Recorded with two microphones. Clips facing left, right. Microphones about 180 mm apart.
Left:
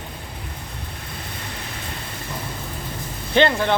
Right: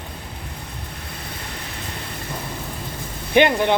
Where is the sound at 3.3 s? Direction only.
15° right (ahead or behind).